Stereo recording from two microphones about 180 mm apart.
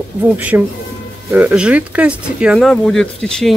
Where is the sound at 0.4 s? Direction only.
10° right (ahead or behind).